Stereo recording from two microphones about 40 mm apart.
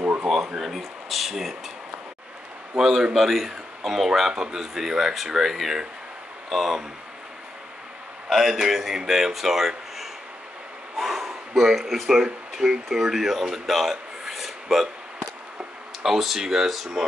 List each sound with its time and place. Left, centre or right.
0.3 s a sound: centre
2.7 s a man's voice: centre
8.3 s speech: centre
16.0 s speech: centre